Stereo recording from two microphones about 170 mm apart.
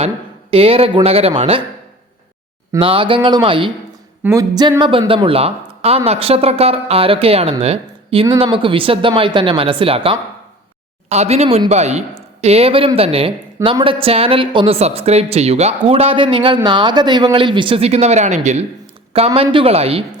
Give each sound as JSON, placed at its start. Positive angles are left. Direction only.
{"t": 0.5, "sound": "a woman's voice", "side_deg": -35}
{"t": 2.7, "sound": "a woman's voice", "side_deg": -30}
{"t": 4.2, "sound": "a woman's voice", "side_deg": -15}